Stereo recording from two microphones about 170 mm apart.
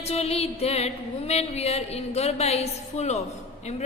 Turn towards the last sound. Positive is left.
turn(degrees=40)  # may be behind; listen again after turning